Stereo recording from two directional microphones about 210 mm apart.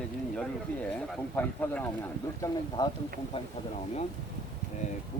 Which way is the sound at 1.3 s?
10° left (ahead or behind).